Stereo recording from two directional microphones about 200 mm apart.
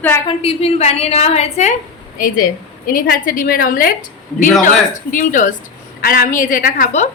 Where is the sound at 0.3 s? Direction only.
30° left (ahead or behind).